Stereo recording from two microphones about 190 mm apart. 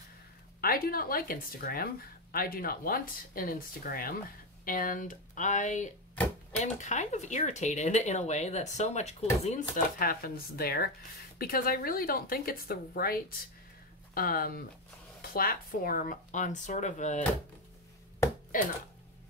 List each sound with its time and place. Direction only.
0.6 s speech: 50° left (ahead or behind)